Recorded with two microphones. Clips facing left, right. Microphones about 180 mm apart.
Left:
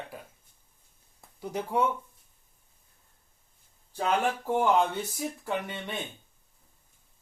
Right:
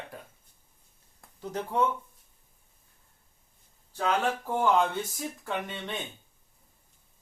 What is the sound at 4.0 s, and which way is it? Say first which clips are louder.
Speech: even; 15° left (ahead or behind).